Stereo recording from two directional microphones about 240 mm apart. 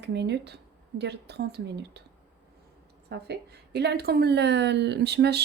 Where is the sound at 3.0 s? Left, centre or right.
Right.